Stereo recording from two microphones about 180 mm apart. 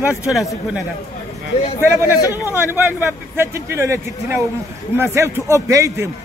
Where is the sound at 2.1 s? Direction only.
20° left (ahead or behind).